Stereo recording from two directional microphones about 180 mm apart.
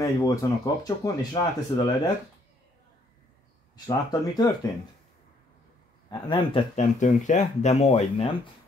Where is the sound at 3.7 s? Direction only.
20° left (ahead or behind).